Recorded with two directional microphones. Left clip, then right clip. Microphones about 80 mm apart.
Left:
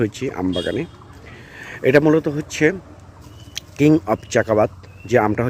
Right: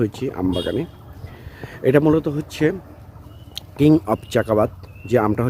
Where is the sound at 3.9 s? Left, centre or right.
Right.